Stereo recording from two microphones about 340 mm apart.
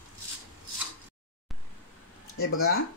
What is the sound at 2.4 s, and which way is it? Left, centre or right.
Speech, left.